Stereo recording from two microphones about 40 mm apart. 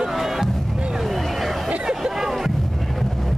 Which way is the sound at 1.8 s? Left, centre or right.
Centre.